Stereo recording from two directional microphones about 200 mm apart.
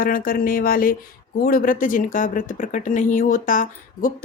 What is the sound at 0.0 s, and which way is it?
Speech, 45° left (ahead or behind).